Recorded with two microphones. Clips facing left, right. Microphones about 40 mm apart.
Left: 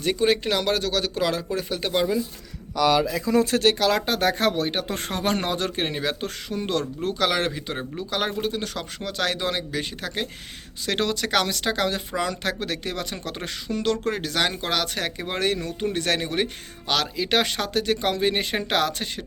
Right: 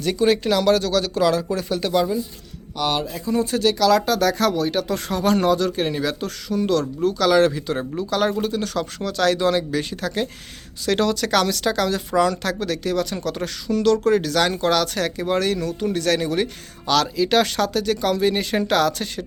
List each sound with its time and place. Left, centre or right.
0.0 s speech: centre
3.0 s speech: left
3.8 s speech: left